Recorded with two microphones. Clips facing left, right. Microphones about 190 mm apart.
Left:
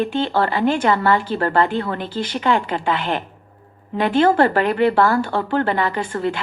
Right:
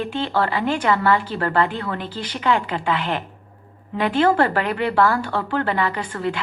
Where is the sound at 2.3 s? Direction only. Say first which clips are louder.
Left 1 dB; 45° left (ahead or behind).